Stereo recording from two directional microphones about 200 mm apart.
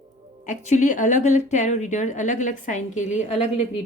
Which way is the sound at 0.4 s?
40° left (ahead or behind).